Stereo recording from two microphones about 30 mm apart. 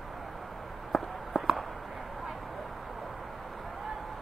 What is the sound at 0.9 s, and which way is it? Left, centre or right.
Walk, centre.